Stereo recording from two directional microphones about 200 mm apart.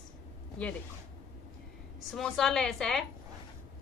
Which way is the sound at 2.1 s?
Centre (ahead or behind).